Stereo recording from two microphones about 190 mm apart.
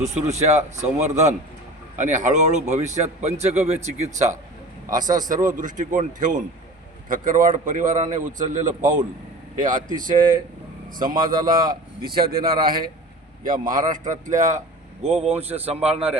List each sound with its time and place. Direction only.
0.0 s a man's voice: 35° right (ahead or behind)
4.9 s a man's voice: 20° right (ahead or behind)
5.3 s a man's voice: 40° right (ahead or behind)